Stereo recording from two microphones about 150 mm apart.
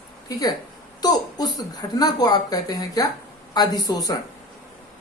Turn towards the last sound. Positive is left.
turn(degrees=25)  # may be behind; listen again after turning